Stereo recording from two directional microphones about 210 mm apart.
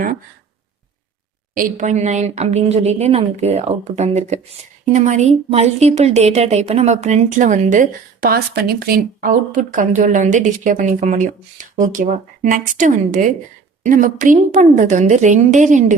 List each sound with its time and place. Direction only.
1.5 s a woman's voice: 35° right (ahead or behind)